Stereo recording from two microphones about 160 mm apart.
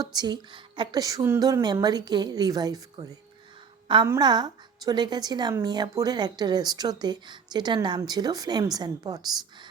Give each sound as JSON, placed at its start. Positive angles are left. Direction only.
{"t": 0.0, "sound": "speech", "side_deg": -25}
{"t": 4.2, "sound": "speech", "side_deg": -25}